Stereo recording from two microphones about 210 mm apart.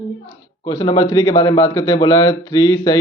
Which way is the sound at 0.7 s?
20° left (ahead or behind).